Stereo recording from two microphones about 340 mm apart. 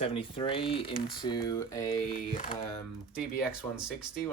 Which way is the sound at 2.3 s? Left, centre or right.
Centre.